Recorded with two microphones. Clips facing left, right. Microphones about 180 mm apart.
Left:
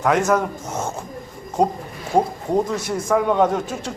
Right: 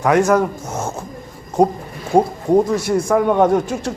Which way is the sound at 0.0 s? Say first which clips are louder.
Right 4 dB; 10° right (ahead or behind).